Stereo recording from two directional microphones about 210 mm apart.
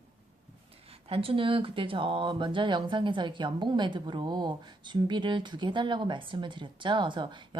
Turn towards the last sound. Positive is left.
turn(degrees=-20)  # may be behind; listen again after turning